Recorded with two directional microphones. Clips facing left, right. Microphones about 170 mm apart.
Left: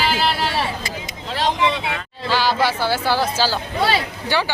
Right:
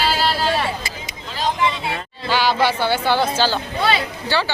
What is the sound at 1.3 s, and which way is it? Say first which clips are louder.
Vehicle: left 1 dB; 75° left (ahead or behind).